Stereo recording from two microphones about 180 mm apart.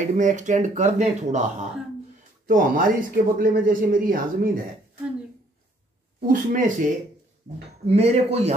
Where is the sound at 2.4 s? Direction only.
50° right (ahead or behind).